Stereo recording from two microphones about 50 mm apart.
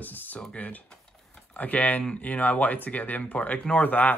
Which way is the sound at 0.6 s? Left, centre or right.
Left.